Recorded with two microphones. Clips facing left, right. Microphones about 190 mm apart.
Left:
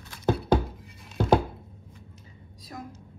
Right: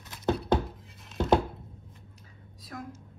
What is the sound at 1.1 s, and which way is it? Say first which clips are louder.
Music: left 2 dB; centre (ahead or behind).